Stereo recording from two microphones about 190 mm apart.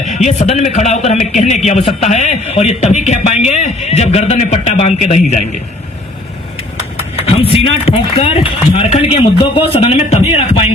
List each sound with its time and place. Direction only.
0.0 s a man's voice: 40° left (ahead or behind)
7.3 s a man's voice: 30° left (ahead or behind)